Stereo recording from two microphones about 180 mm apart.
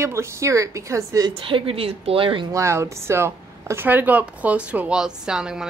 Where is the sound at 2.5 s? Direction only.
15° right (ahead or behind).